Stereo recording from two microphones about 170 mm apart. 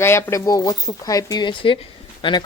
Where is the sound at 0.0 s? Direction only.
15° left (ahead or behind).